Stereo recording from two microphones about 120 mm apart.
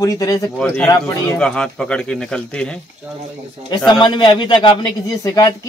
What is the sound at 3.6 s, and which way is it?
A man's voice, 40° left (ahead or behind).